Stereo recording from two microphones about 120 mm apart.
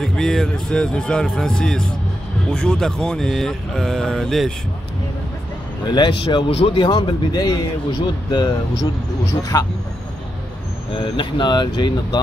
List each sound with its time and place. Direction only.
0.0 s speech: 5° left (ahead or behind)
5.9 s a man's voice: 40° left (ahead or behind)
6.5 s a man's voice: 50° left (ahead or behind)
9.4 s speech: 25° left (ahead or behind)
11.0 s a man's voice: 40° left (ahead or behind)